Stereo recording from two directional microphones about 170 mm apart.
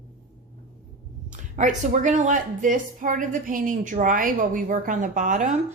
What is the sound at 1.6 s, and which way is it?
A woman's voice, 45° right (ahead or behind).